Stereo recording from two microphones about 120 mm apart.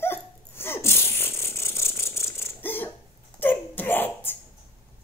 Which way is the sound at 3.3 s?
15° left (ahead or behind).